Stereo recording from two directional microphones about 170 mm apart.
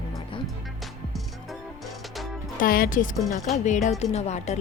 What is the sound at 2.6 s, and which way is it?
Speech, 55° left (ahead or behind).